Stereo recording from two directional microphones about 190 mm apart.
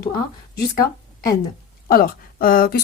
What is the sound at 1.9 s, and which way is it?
Speech, 50° left (ahead or behind).